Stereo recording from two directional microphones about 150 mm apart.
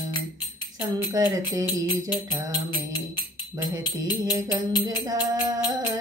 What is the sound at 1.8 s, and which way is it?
Music, 30° left (ahead or behind).